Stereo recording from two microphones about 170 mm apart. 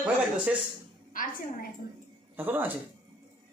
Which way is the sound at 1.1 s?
55° left (ahead or behind).